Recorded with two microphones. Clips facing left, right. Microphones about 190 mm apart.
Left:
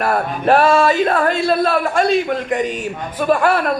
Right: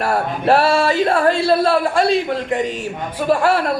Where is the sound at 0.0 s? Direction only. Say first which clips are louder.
Left 1 dB; 30° right (ahead or behind).